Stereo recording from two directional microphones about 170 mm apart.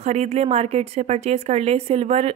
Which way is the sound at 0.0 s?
40° right (ahead or behind).